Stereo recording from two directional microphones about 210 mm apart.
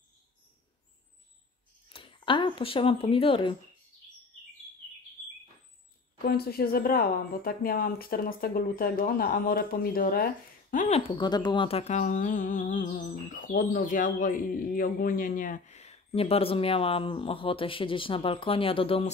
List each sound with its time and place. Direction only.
1.9 s speech: 25° left (ahead or behind)
6.2 s speech: 45° left (ahead or behind)
11.1 s speech: 20° left (ahead or behind)